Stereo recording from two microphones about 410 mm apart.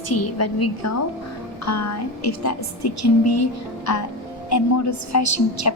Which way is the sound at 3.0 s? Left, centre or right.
Left.